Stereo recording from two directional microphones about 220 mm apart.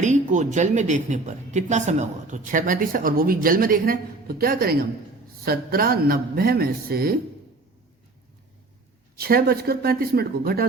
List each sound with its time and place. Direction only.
0.0 s a woman's voice: 35° right (ahead or behind)
9.1 s a woman's voice: 45° right (ahead or behind)